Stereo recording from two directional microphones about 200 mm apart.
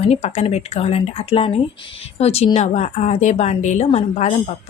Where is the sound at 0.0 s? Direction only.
35° left (ahead or behind).